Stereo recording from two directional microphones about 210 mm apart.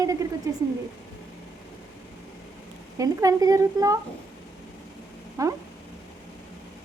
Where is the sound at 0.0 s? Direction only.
15° right (ahead or behind).